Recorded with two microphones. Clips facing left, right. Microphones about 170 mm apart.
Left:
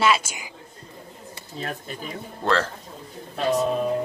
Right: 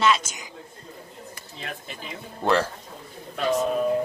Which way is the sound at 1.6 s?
40° left (ahead or behind).